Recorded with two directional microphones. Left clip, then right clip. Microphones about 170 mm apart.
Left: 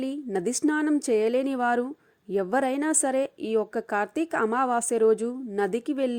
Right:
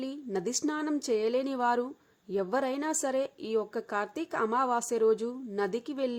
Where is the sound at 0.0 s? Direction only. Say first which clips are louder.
Left 5 dB; 30° left (ahead or behind).